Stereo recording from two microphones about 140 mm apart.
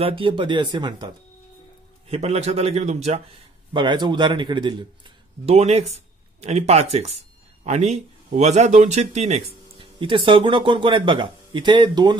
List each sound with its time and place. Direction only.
0.0 s speech: 40° right (ahead or behind)
2.0 s a man's voice: 50° right (ahead or behind)
3.7 s a man's voice: 35° right (ahead or behind)